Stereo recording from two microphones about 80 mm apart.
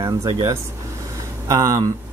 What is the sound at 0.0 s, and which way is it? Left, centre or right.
Speech, right.